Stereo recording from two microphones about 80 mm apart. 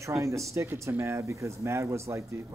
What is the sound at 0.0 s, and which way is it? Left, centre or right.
Speech, right.